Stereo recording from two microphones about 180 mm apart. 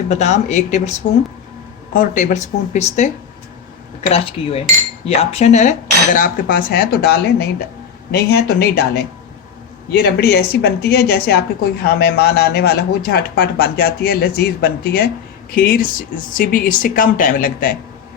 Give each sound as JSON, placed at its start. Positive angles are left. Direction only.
{"t": 0.1, "sound": "speech", "side_deg": 40}
{"t": 4.1, "sound": "a woman's voice", "side_deg": 35}
{"t": 9.9, "sound": "a woman's voice", "side_deg": 60}